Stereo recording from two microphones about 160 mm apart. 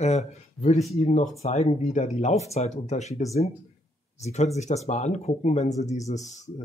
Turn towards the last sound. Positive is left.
turn(degrees=45)  # may be behind; listen again after turning